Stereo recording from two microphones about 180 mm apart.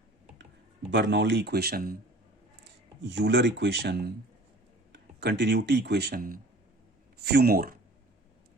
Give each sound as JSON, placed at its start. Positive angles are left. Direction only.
{"t": 0.9, "sound": "speech", "side_deg": -75}
{"t": 2.6, "sound": "speech", "side_deg": -75}